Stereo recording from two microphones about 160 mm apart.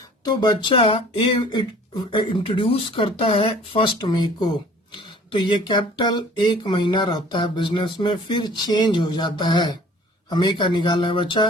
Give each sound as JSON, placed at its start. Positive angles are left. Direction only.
{"t": 0.3, "sound": "speech", "side_deg": 30}